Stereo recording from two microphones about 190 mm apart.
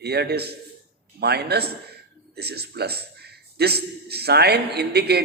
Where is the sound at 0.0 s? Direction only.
60° right (ahead or behind).